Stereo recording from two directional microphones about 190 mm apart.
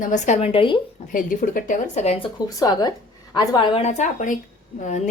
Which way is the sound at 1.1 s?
45° left (ahead or behind).